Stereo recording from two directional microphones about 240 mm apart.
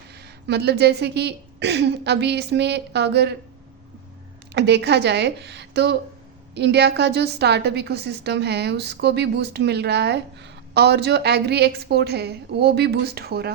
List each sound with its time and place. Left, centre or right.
0.1 s a woman's voice: right
4.5 s a woman's voice: right